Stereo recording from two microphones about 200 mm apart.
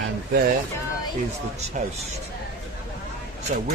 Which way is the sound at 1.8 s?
40° right (ahead or behind).